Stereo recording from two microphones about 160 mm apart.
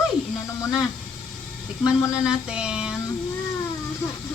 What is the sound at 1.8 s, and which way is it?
Speech, 5° right (ahead or behind).